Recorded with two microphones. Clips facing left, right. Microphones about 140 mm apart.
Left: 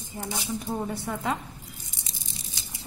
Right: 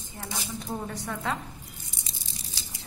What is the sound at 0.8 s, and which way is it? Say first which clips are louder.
Speech: left 3 dB; 15° left (ahead or behind).